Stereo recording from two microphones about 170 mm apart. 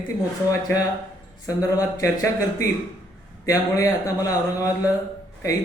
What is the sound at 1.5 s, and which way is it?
Speech, 20° left (ahead or behind).